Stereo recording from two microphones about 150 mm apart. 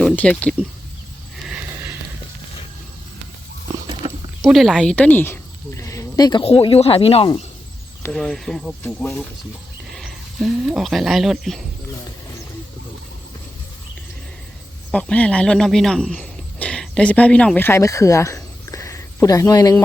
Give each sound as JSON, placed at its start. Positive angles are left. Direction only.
{"t": 0.0, "sound": "speech", "side_deg": 10}
{"t": 1.5, "sound": "sniff", "side_deg": -10}
{"t": 4.0, "sound": "a sound", "side_deg": -30}
{"t": 4.4, "sound": "speech", "side_deg": 0}
{"t": 6.4, "sound": "speech", "side_deg": 40}
{"t": 8.1, "sound": "speech", "side_deg": 5}
{"t": 9.9, "sound": "speech", "side_deg": 0}
{"t": 14.8, "sound": "speech", "side_deg": 10}